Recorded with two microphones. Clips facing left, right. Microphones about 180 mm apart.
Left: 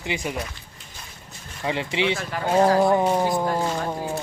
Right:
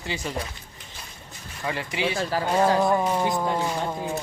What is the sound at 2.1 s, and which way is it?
Speech, 30° right (ahead or behind).